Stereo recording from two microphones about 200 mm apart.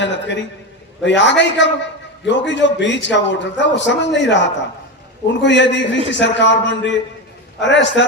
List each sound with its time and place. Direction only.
0.0 s a man's voice: 65° left (ahead or behind)